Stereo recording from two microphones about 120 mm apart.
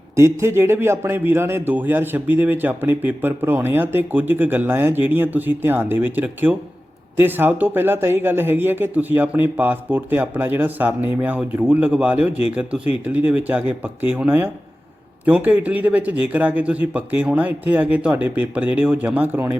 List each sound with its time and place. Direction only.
0.2 s a man's voice: 25° right (ahead or behind)